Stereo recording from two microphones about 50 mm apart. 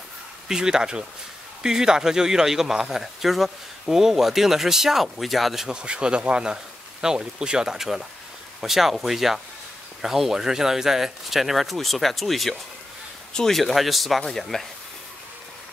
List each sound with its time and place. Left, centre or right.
0.5 s speech: centre
5.7 s speech: centre
13.3 s a man's voice: centre
13.6 s speech: centre